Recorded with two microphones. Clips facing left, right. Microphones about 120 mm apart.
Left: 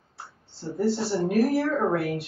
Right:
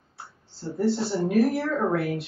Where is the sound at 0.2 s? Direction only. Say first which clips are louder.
Right 1 dB; centre (ahead or behind).